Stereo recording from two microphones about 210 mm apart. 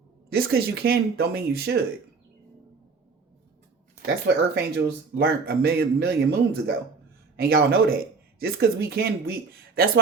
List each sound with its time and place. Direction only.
0.3 s speech: 45° right (ahead or behind)
4.0 s speech: 50° right (ahead or behind)